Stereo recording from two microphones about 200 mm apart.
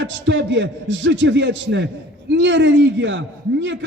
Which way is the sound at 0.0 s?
65° right (ahead or behind).